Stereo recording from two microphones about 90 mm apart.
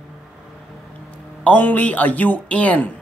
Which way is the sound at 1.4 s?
20° left (ahead or behind).